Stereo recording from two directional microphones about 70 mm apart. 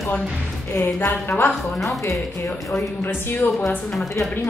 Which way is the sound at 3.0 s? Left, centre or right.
Left.